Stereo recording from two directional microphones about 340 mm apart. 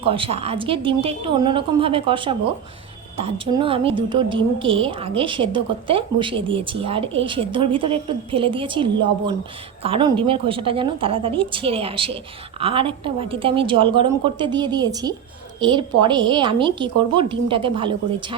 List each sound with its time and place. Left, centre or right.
0.0 s a woman's voice: centre